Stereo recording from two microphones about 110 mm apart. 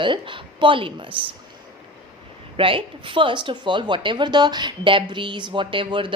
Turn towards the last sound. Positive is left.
turn(degrees=-50)  # may be behind; listen again after turning